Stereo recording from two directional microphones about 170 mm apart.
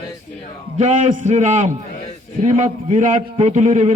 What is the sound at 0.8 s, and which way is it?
A man's voice, 40° right (ahead or behind).